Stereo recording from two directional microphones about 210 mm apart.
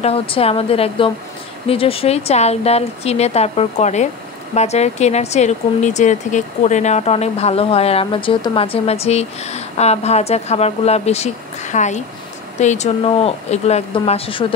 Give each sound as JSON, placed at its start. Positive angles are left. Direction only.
{"t": 0.0, "sound": "speech", "side_deg": 30}